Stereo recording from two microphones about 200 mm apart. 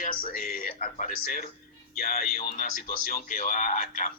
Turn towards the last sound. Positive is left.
turn(degrees=40)  # may be behind; listen again after turning